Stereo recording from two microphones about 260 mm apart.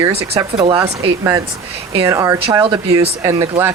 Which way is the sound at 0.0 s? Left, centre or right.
Centre.